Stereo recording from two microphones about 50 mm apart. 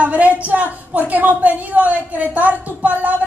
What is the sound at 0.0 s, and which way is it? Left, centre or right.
A woman's voice, right.